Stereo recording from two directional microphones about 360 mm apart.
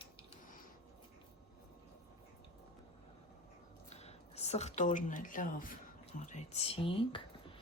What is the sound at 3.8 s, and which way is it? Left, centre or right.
Speech, centre.